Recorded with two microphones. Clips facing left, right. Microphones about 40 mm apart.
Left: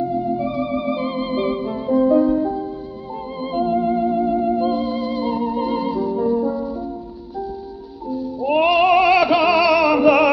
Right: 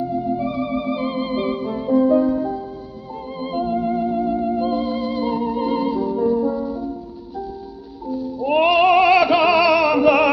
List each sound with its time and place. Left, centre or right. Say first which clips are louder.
0.2 s organ: left 1 dB; centre
0.9 s music: even; centre
1.2 s music: left 1 dB; centre
1.9 s music: even; centre
2.2 s music: left 2 dB; left
3.5 s music: left 2 dB; centre
8.4 s music: even; centre